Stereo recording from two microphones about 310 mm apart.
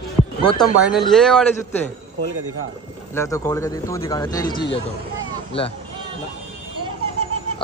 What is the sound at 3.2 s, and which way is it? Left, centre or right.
Speech, centre.